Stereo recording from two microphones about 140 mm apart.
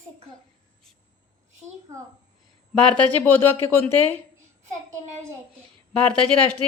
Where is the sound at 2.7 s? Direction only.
5° left (ahead or behind).